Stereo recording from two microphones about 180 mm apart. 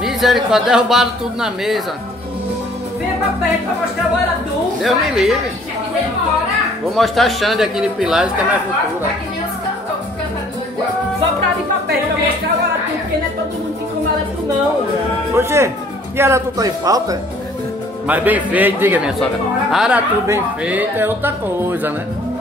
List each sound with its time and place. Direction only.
0.0 s speech: centre (ahead or behind)
4.8 s speech: centre (ahead or behind)
7.0 s speech: centre (ahead or behind)
15.3 s speech: 15° right (ahead or behind)
18.0 s speech: 10° right (ahead or behind)